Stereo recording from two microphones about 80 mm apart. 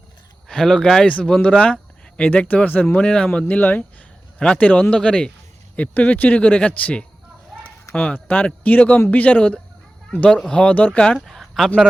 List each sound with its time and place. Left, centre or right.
0.4 s speech: centre
3.4 s speech: left; by 11.7 s centre